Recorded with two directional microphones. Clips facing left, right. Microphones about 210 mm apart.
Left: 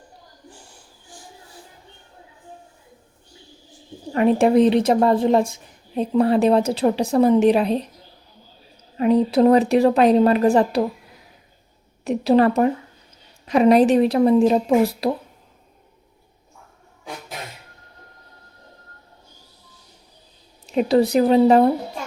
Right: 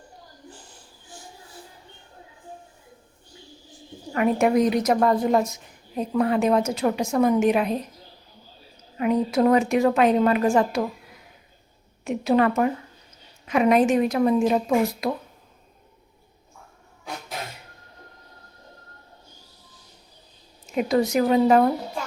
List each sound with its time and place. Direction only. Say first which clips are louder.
4.1 s a woman's voice: left 4 dB; 30° left (ahead or behind)
9.0 s a woman's voice: left 5 dB; 30° left (ahead or behind)
12.0 s a woman's voice: left 4 dB; 35° left (ahead or behind)
20.7 s a woman's voice: left 4 dB; 30° left (ahead or behind)